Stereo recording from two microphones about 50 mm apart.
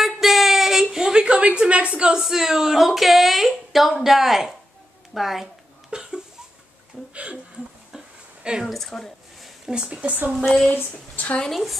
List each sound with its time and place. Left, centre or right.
0.0 s child singing: centre
0.9 s a sound: centre
2.1 s speech: centre
5.9 s cough: centre
8.6 s speech: centre
9.7 s speech: right
10.3 s speech: centre
10.7 s a woman's voice: left